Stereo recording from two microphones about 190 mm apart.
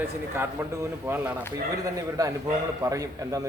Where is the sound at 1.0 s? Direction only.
10° right (ahead or behind).